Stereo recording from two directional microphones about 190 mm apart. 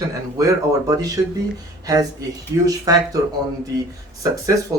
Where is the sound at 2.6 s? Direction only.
20° right (ahead or behind).